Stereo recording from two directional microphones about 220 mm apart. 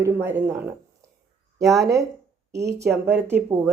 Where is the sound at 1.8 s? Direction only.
15° right (ahead or behind).